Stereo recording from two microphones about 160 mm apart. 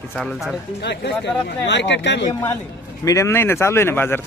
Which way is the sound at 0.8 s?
90° left.